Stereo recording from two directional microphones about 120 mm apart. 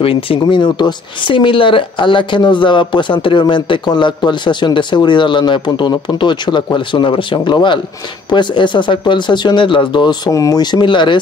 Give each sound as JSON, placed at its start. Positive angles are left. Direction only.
{"t": 0.0, "sound": "speech", "side_deg": 50}